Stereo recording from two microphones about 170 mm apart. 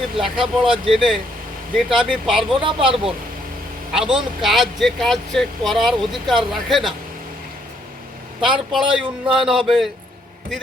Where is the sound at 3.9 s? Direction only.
5° right (ahead or behind).